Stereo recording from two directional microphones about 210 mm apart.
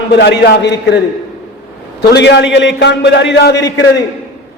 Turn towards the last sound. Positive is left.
turn(degrees=55)  # may be behind; listen again after turning